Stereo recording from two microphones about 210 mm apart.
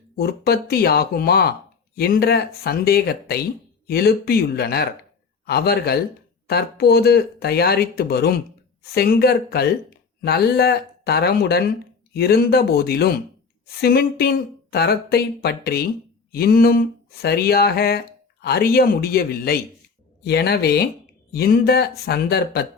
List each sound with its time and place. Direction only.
0.2 s speech: 45° left (ahead or behind)